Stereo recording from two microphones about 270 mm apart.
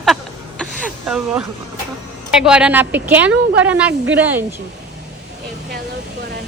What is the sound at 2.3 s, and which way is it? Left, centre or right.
A woman's voice, centre.